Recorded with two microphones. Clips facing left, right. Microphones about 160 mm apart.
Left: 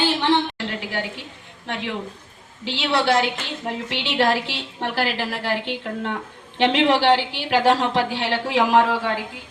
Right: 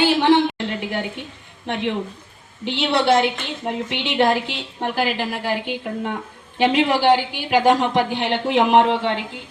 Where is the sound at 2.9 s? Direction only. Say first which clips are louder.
Right 2 dB; 20° right (ahead or behind).